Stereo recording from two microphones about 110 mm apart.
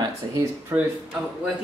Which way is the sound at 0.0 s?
30° right (ahead or behind).